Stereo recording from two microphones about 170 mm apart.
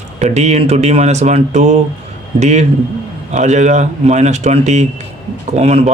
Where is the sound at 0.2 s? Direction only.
45° right (ahead or behind).